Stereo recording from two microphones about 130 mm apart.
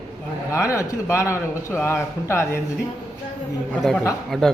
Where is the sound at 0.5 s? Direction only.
20° left (ahead or behind).